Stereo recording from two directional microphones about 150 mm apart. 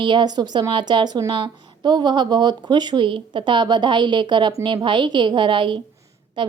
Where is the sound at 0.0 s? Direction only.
30° right (ahead or behind).